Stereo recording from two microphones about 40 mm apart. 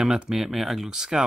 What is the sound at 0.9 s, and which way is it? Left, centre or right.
Speech, centre.